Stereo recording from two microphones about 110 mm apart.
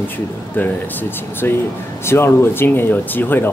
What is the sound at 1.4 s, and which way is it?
Speech, 20° left (ahead or behind).